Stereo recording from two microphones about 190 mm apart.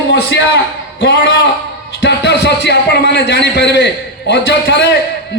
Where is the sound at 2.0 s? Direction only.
60° left (ahead or behind).